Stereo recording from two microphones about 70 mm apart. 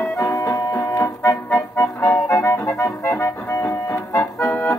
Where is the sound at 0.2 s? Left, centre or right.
Left.